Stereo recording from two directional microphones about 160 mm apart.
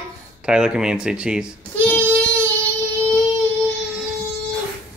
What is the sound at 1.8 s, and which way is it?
Child singing, 10° left (ahead or behind).